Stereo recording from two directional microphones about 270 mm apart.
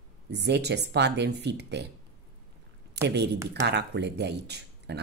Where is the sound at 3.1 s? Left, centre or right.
Right.